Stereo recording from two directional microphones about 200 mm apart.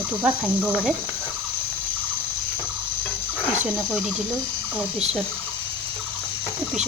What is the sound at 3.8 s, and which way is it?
Speech, centre (ahead or behind).